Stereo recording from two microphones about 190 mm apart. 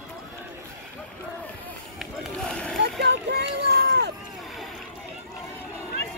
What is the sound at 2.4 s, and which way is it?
Splash, 5° left (ahead or behind).